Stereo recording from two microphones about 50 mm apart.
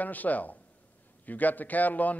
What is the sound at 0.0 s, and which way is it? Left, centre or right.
A man's voice, left.